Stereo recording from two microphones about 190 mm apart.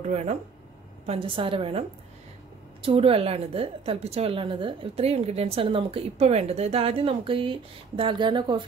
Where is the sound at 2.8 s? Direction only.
30° right (ahead or behind).